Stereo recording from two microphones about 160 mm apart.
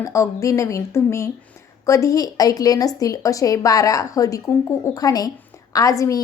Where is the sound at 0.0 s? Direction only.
20° left (ahead or behind).